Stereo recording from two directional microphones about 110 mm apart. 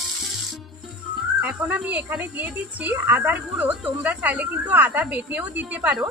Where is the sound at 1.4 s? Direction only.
15° right (ahead or behind).